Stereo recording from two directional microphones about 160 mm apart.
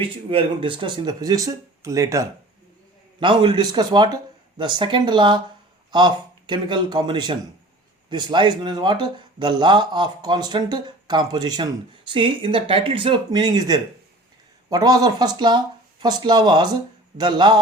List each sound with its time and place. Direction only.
0.0 s speech: 35° right (ahead or behind)
3.2 s speech: 30° right (ahead or behind)
6.5 s speech: 30° right (ahead or behind)